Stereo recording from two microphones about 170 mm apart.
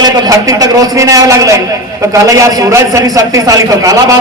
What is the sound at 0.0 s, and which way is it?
A man's voice, 20° right (ahead or behind).